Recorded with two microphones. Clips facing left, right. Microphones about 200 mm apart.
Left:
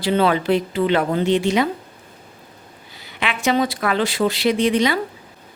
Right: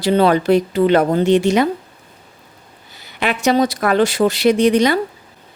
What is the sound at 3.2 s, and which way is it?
Speech, 40° right (ahead or behind).